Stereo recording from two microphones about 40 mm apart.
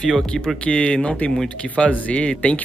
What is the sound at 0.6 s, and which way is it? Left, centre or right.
Speech, left.